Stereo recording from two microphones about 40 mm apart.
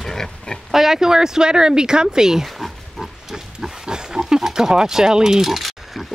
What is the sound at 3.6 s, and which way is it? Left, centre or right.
Pig, centre.